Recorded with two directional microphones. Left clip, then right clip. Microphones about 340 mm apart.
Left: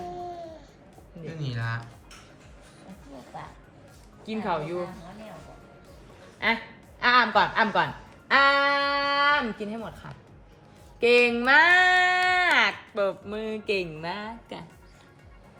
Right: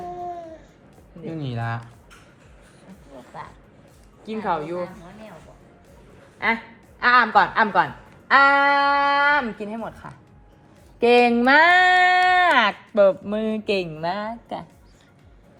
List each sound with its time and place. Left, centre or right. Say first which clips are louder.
0.0 s a sound: right 4 dB; centre
1.3 s music: right 5 dB; centre
2.9 s a sound: right 2 dB; centre
4.3 s a woman's voice: right 4 dB; centre
7.0 s a woman's voice: right 4 dB; centre
11.0 s speech: right 4 dB; centre